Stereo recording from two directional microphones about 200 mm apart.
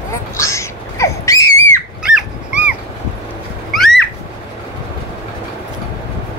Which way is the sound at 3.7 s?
Centre (ahead or behind).